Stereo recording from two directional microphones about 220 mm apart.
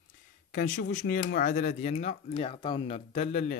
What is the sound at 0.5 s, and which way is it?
Speech, 35° left (ahead or behind).